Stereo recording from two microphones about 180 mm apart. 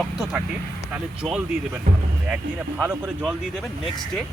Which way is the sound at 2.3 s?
5° right (ahead or behind).